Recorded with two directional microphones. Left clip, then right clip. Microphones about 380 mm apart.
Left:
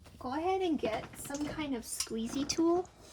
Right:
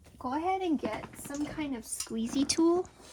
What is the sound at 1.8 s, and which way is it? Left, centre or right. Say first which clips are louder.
Speech: right 1 dB; centre.